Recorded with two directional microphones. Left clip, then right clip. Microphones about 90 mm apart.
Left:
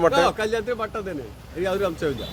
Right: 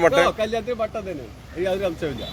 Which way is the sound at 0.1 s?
50° left (ahead or behind).